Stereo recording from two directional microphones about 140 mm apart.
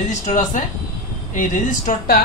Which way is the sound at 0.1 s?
65° left (ahead or behind).